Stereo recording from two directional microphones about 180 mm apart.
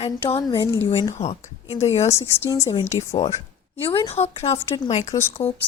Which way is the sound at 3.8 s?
30° left (ahead or behind).